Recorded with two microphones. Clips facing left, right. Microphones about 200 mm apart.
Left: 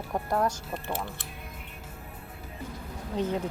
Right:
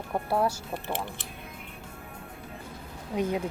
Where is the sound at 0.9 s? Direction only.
20° right (ahead or behind).